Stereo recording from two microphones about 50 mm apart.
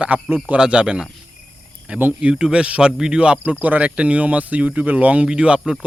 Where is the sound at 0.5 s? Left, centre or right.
Centre.